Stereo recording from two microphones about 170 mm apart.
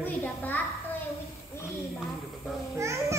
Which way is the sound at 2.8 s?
15° right (ahead or behind).